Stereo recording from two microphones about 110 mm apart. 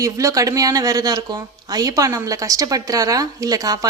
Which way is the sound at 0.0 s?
30° right (ahead or behind).